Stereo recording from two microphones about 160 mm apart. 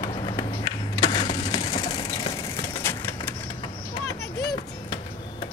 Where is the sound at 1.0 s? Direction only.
30° left (ahead or behind).